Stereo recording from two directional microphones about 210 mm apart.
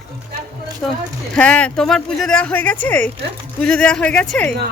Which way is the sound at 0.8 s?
5° left (ahead or behind).